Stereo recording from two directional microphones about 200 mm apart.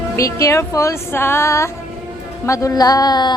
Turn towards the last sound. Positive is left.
turn(degrees=20)  # may be behind; listen again after turning